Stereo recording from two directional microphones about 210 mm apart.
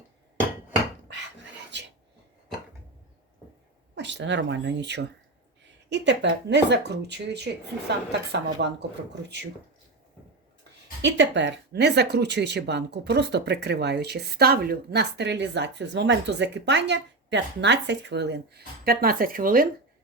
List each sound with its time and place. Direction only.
3.9 s a woman's voice: 55° right (ahead or behind)
11.0 s speech: 60° right (ahead or behind); by 19.6 s 40° right (ahead or behind)